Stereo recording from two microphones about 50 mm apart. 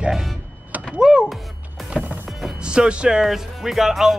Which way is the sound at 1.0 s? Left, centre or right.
Centre.